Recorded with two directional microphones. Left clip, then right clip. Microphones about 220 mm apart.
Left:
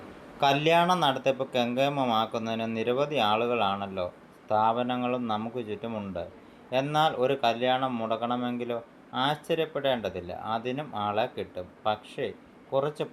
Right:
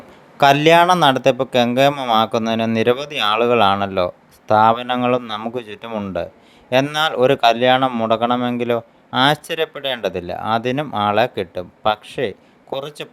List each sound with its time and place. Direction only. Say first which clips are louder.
0.3 s speech: right 11 dB; 45° right (ahead or behind)